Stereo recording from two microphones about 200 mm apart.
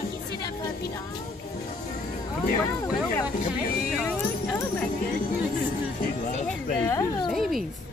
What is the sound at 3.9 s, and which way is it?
Music, 5° left (ahead or behind).